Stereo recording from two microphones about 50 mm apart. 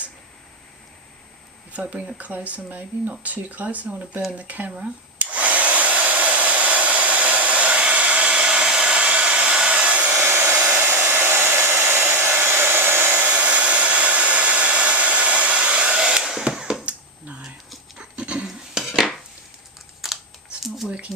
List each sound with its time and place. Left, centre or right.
1.7 s speech: right
5.2 s hair dryer: right
10.3 s hair dryer: right
11.1 s hair dryer: right
13.1 s hair dryer: right; by 16.6 s centre
16.8 s a sound: right
17.9 s dog: right
18.4 s cutlery: centre
20.0 s computer keyboard: centre
20.6 s a sound: centre